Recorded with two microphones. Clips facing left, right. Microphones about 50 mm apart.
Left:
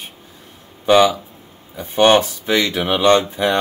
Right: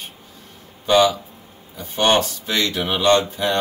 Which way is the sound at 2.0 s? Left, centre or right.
Centre.